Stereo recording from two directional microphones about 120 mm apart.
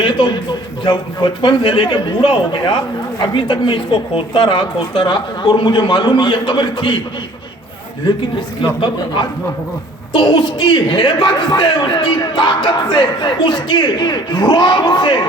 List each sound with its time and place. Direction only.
0.0 s a sound: 40° left (ahead or behind)
0.9 s a man's voice: 40° left (ahead or behind)
10.1 s a man's voice: 45° left (ahead or behind)